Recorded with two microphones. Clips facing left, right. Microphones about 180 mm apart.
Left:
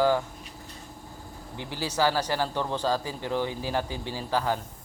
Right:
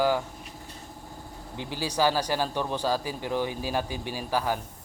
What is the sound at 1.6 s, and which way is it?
Speech, 15° right (ahead or behind).